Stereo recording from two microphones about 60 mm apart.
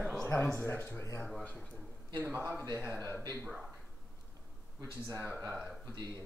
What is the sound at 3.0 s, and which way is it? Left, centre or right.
Speech, left.